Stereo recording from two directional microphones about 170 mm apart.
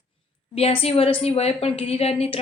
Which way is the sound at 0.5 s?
35° left (ahead or behind).